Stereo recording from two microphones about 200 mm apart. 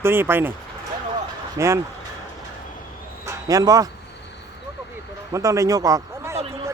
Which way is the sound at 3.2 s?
15° right (ahead or behind).